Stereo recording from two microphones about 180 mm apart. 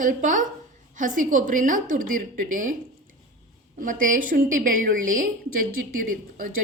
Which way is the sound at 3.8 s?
45° right (ahead or behind).